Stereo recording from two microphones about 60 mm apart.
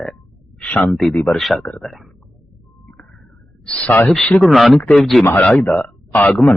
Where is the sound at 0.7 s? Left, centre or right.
Left.